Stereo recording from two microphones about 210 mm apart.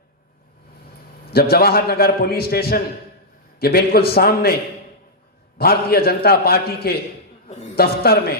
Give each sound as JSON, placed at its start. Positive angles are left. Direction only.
{"t": 1.3, "sound": "a man's voice", "side_deg": 50}
{"t": 5.5, "sound": "a man's voice", "side_deg": 45}